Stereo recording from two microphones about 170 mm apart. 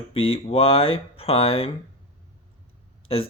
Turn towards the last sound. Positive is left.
turn(degrees=35)  # may be behind; listen again after turning